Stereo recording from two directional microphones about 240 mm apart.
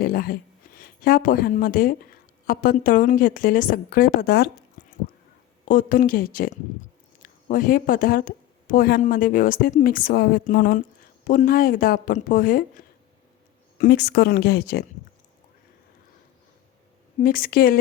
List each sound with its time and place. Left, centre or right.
0.0 s a sound: left
0.8 s a woman's voice: left
5.6 s speech: left
13.7 s speech: left
17.2 s speech: left